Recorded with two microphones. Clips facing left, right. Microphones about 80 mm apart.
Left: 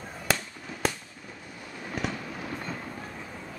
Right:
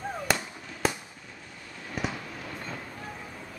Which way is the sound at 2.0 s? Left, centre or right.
Centre.